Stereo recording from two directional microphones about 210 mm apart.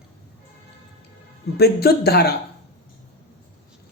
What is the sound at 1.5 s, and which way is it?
Speech, 50° left (ahead or behind).